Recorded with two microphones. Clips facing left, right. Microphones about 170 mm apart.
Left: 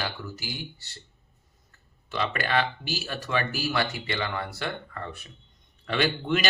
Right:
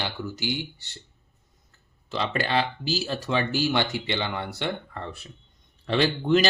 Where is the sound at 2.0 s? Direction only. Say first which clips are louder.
Right 2 dB; 25° right (ahead or behind).